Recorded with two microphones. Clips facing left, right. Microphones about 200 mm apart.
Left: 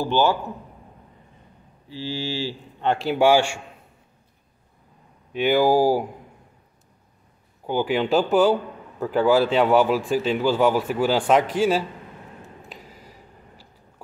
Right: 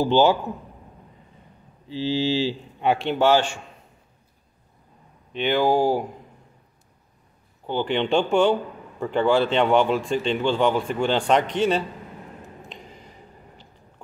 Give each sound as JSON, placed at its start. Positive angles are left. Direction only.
{"t": 0.0, "sound": "a man's voice", "side_deg": -15}
{"t": 1.9, "sound": "speech", "side_deg": -20}
{"t": 2.9, "sound": "a man's voice", "side_deg": 0}
{"t": 5.3, "sound": "speech", "side_deg": 5}
{"t": 7.6, "sound": "speech", "side_deg": 10}
{"t": 12.6, "sound": "a sound", "side_deg": 5}